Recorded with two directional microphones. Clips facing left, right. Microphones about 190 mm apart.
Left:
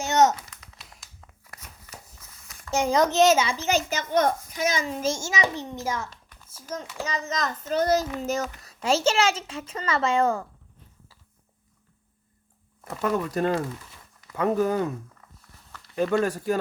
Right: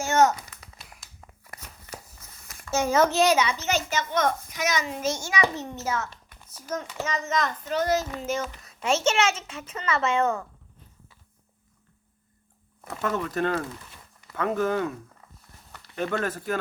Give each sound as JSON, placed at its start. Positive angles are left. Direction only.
{"t": 0.0, "sound": "speech", "side_deg": 20}
{"t": 0.6, "sound": "a sound", "side_deg": 0}
{"t": 2.6, "sound": "a child's voice", "side_deg": 15}
{"t": 3.8, "sound": "speech", "side_deg": 40}
{"t": 5.3, "sound": "a child's voice", "side_deg": 15}
{"t": 7.0, "sound": "speech", "side_deg": 35}
{"t": 13.0, "sound": "a child's voice", "side_deg": 15}
{"t": 16.0, "sound": "a child's voice", "side_deg": 15}